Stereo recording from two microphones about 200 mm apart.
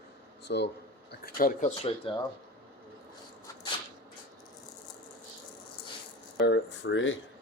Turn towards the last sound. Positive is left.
turn(degrees=70)  # may be behind; listen again after turning